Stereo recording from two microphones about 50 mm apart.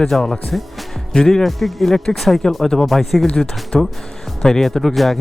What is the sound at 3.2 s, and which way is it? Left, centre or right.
Speech, centre.